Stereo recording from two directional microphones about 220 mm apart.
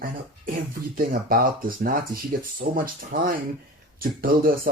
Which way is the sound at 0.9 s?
40° right (ahead or behind).